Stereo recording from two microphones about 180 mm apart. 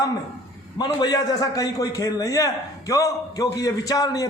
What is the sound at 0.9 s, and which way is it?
A man's voice, 20° left (ahead or behind).